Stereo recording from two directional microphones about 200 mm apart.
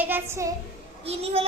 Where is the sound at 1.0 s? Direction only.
30° right (ahead or behind).